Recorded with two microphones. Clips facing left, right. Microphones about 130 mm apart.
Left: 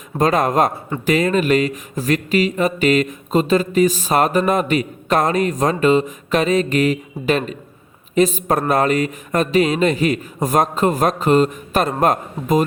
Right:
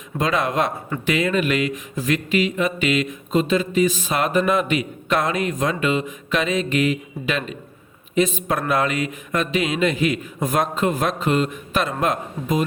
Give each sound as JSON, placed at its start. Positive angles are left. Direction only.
{"t": 0.2, "sound": "a man's voice", "side_deg": 45}